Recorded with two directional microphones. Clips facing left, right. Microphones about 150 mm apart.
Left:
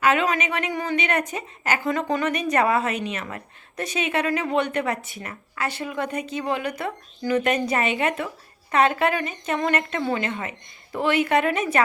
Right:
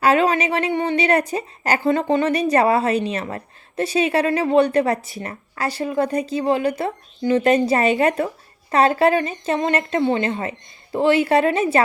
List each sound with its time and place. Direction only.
0.0 s a woman's voice: 35° right (ahead or behind)